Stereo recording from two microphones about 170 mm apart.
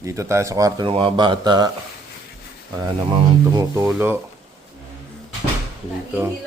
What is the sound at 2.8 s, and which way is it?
Speech, 25° right (ahead or behind).